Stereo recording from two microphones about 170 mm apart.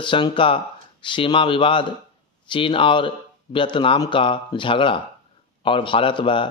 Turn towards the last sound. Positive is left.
turn(degrees=30)  # may be behind; listen again after turning